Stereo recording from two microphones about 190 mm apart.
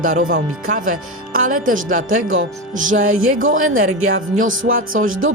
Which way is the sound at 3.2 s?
90° right.